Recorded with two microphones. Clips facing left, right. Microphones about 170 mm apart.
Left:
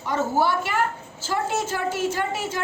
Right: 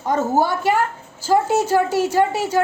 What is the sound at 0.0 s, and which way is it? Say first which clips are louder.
Speech: right 4 dB; 45° right (ahead or behind).